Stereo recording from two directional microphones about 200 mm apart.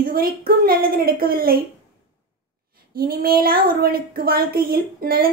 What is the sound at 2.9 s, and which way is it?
A woman's voice, 50° right (ahead or behind).